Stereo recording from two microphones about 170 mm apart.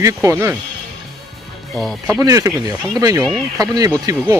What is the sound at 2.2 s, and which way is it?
Speech, 20° right (ahead or behind).